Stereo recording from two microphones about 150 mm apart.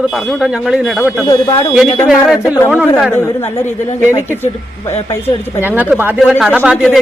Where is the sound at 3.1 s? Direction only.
15° left (ahead or behind).